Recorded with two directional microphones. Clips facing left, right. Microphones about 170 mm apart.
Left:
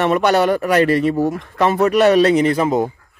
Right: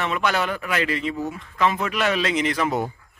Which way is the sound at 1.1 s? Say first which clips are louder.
Left 10 dB; 85° left.